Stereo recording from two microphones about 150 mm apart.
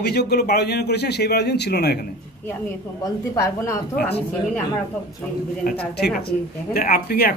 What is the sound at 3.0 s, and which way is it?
Speech, 20° left (ahead or behind).